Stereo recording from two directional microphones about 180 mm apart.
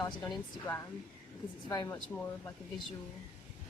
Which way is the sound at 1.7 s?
20° left (ahead or behind).